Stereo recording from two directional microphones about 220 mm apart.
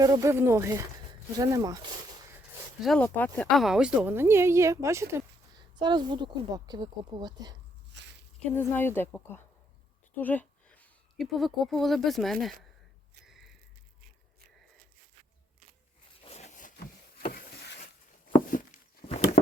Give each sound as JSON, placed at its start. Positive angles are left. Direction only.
{"t": 0.0, "sound": "speech", "side_deg": -15}
{"t": 2.8, "sound": "speech", "side_deg": 5}
{"t": 8.5, "sound": "speech", "side_deg": 10}
{"t": 13.2, "sound": "a sound", "side_deg": 0}
{"t": 16.2, "sound": "zipper", "side_deg": 30}
{"t": 17.3, "sound": "a sound", "side_deg": 45}
{"t": 18.5, "sound": "walk", "side_deg": 35}